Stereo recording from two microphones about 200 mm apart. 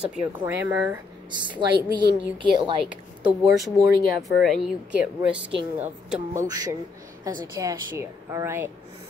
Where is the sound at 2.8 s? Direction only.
Centre (ahead or behind).